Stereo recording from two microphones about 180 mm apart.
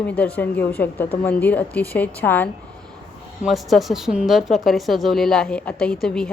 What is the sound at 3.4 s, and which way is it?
A woman's voice, centre (ahead or behind).